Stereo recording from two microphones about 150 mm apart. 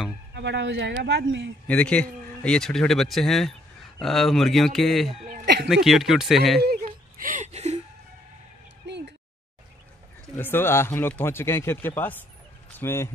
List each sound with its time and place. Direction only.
0.3 s speech: 90° right
1.7 s speech: 10° left (ahead or behind)
6.6 s whimper: 80° right
7.4 s music: 45° right (ahead or behind)
10.3 s speech: 15° left (ahead or behind)